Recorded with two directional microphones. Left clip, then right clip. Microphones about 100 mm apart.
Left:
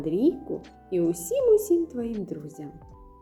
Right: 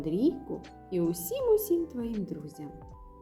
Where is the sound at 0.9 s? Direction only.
30° right (ahead or behind).